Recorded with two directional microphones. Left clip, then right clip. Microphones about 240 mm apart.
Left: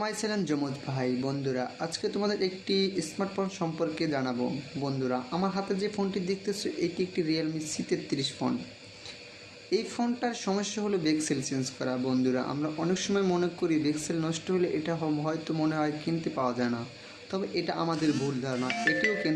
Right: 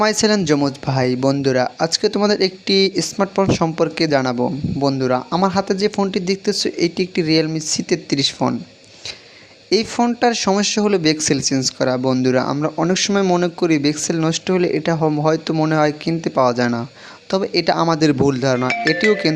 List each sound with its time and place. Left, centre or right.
0.0 s speech: right
9.6 s speech: right